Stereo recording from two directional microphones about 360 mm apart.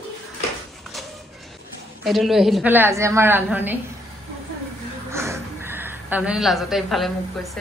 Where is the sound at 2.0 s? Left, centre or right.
Centre.